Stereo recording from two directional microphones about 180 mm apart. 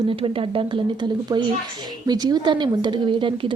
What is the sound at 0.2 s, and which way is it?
Speech, 30° right (ahead or behind).